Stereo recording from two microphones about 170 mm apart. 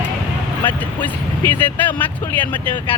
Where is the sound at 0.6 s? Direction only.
10° left (ahead or behind).